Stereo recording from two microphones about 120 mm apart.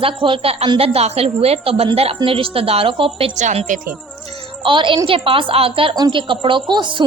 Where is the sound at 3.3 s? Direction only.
70° right (ahead or behind).